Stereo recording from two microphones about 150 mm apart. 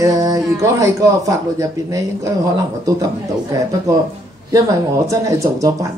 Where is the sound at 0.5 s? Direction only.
20° right (ahead or behind).